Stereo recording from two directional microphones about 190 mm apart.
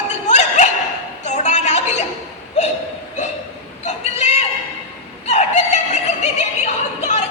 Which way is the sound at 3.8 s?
35° left (ahead or behind).